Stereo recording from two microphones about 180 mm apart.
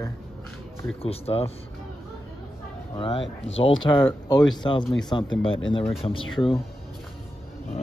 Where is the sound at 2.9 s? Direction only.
30° left (ahead or behind).